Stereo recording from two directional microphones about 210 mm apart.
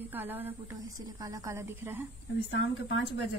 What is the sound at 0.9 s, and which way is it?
A woman's voice, 15° right (ahead or behind).